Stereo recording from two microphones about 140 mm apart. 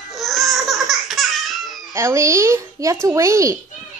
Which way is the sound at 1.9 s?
20° right (ahead or behind).